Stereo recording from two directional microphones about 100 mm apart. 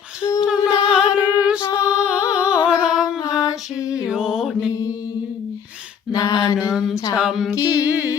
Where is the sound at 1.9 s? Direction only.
10° right (ahead or behind).